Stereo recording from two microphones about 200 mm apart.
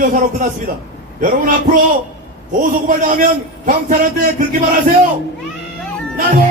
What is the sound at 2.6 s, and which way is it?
A man's voice, 40° right (ahead or behind).